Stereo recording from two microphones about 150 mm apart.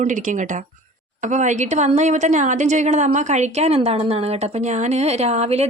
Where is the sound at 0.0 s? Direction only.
55° right (ahead or behind).